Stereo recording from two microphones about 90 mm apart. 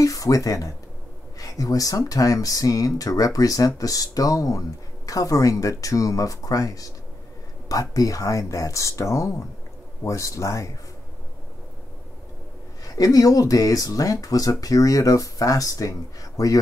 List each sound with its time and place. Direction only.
0.0 s speech: 40° left (ahead or behind)
12.8 s speech: 40° left (ahead or behind)